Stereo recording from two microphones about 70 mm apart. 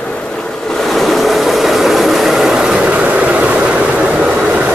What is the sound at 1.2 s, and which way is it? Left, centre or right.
Vehicle, centre.